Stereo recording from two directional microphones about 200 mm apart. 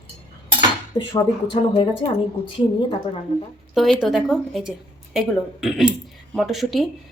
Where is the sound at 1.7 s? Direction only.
25° left (ahead or behind).